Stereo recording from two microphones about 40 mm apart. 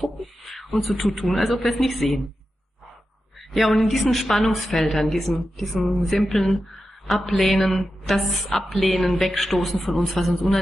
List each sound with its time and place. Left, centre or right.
0.0 s beatboxing: centre
0.7 s a man's voice: centre
3.3 s a sound: centre
3.9 s a man's voice: centre